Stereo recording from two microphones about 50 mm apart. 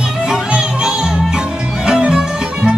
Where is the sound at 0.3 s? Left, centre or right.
Centre.